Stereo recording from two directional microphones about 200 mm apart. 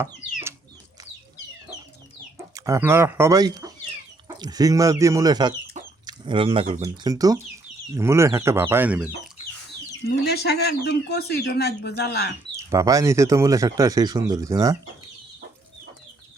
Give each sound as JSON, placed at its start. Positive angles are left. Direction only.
{"t": 2.6, "sound": "speech", "side_deg": -15}
{"t": 5.8, "sound": "chicken", "side_deg": -20}
{"t": 6.8, "sound": "speech", "side_deg": -20}
{"t": 10.1, "sound": "speech", "side_deg": 55}
{"t": 12.5, "sound": "speech", "side_deg": -15}